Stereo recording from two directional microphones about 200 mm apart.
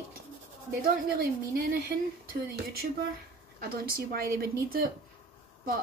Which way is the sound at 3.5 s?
50° right (ahead or behind).